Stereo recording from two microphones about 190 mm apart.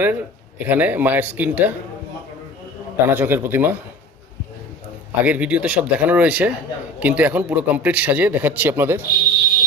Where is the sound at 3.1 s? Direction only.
10° right (ahead or behind).